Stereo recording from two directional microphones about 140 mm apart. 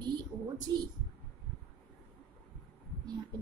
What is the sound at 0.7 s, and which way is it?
Speech, 30° right (ahead or behind).